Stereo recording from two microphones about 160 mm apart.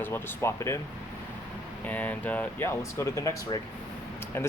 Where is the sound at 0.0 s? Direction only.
15° left (ahead or behind).